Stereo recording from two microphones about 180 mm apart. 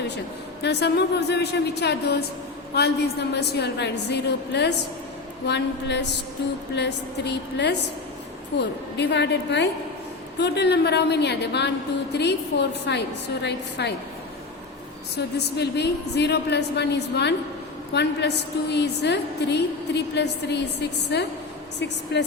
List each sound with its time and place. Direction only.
0.6 s a woman's voice: 70° left (ahead or behind)
15.5 s a woman's voice: 65° left (ahead or behind)